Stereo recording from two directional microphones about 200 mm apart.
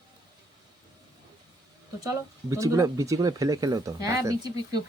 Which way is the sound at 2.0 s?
15° right (ahead or behind).